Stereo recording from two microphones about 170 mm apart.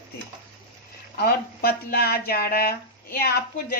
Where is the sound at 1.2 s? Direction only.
65° left (ahead or behind).